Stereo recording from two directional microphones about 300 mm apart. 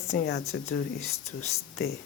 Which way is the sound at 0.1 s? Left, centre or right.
Left.